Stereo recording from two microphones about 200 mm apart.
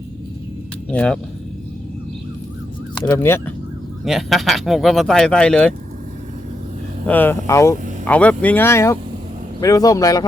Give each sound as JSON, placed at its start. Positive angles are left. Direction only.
{"t": 0.9, "sound": "speech", "side_deg": 5}
{"t": 3.1, "sound": "speech", "side_deg": 10}
{"t": 4.0, "sound": "speech", "side_deg": 0}
{"t": 7.1, "sound": "speech", "side_deg": 10}